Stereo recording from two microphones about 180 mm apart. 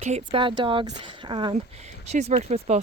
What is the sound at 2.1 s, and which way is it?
Speech, 35° right (ahead or behind).